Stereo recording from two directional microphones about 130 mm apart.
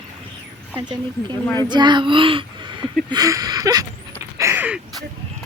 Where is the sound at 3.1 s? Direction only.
30° right (ahead or behind).